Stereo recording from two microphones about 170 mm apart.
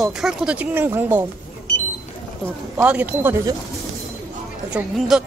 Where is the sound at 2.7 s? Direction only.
10° right (ahead or behind).